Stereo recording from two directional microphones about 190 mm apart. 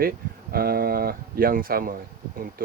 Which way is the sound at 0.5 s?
50° right (ahead or behind).